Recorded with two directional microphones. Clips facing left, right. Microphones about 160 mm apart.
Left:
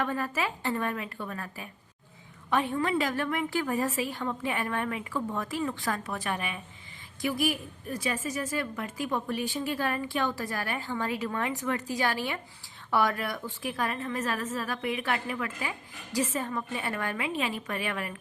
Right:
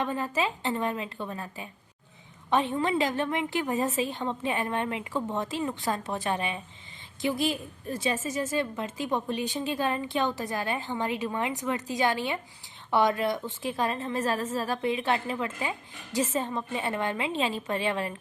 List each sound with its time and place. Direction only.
0.0 s a woman's voice: 20° right (ahead or behind)